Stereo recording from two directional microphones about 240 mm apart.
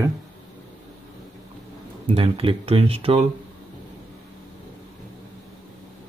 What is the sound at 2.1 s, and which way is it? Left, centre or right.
Speech, right.